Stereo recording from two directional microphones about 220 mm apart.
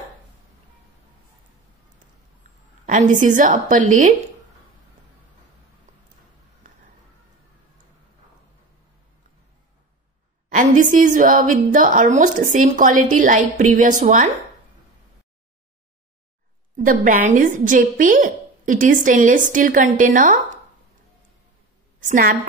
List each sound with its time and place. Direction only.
2.9 s a woman's voice: 35° right (ahead or behind)
10.5 s a woman's voice: 35° right (ahead or behind)
16.7 s a woman's voice: 40° right (ahead or behind)
22.0 s a woman's voice: 35° right (ahead or behind)